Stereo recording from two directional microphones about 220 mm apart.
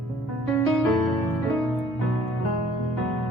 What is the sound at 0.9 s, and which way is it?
Music, centre (ahead or behind).